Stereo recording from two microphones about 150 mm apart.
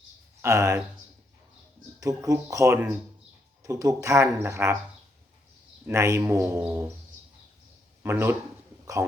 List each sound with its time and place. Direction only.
0.4 s speech: 20° right (ahead or behind)
2.0 s speech: 25° right (ahead or behind)
5.8 s speech: 20° right (ahead or behind)
8.0 s speech: 15° right (ahead or behind)